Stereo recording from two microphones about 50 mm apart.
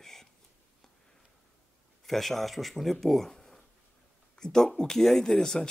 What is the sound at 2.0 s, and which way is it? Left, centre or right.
Speech, centre.